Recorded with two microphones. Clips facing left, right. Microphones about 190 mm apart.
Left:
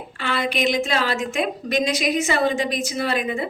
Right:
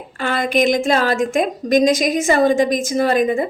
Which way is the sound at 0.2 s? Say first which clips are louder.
Right 6 dB; 45° right (ahead or behind).